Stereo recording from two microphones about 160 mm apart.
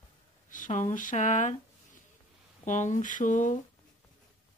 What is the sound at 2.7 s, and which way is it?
Speech, 50° left (ahead or behind).